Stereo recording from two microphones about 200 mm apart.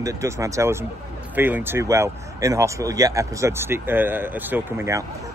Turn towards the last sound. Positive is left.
turn(degrees=-15)  # may be behind; listen again after turning